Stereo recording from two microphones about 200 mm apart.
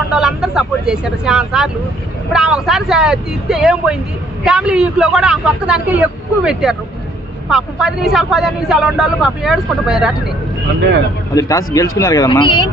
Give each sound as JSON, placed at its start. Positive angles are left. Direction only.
{"t": 0.1, "sound": "speech", "side_deg": -5}
{"t": 11.3, "sound": "speech", "side_deg": 15}